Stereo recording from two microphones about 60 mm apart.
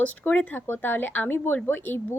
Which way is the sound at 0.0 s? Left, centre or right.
Left.